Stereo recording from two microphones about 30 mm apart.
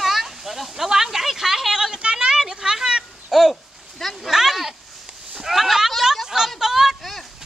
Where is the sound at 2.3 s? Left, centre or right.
Centre.